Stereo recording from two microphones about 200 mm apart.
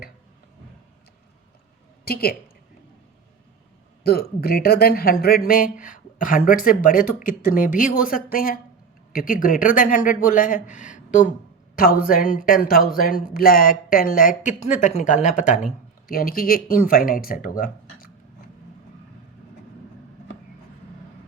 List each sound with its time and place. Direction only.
4.0 s speech: 50° left (ahead or behind)